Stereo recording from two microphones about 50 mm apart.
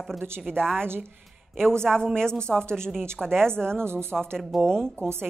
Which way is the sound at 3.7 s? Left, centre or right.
Right.